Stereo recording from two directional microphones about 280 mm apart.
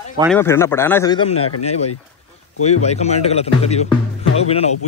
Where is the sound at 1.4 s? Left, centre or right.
Left.